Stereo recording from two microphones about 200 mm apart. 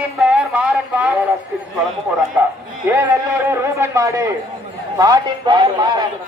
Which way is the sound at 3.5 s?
15° right (ahead or behind).